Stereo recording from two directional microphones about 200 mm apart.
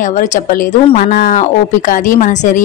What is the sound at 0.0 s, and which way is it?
A woman's voice, 40° left (ahead or behind).